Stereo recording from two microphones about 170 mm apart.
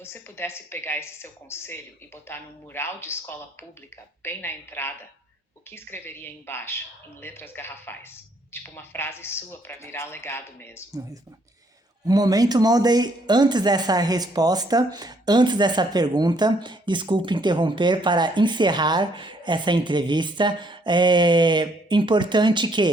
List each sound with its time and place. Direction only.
0.0 s speech: 15° left (ahead or behind)
12.0 s a woman's voice: 20° right (ahead or behind)